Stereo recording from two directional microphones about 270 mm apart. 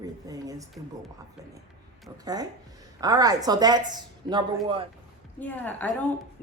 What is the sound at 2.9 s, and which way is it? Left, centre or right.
A woman's voice, centre.